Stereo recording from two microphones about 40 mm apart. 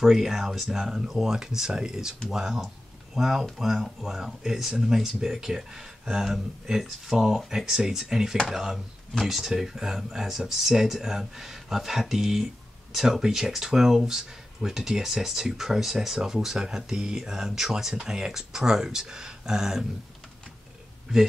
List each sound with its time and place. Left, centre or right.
0.0 s speech: centre